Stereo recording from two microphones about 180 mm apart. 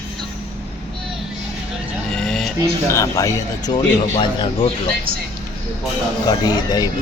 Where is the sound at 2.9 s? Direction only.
15° left (ahead or behind).